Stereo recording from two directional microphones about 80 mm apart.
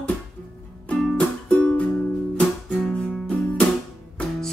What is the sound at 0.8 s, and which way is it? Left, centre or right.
Music, centre.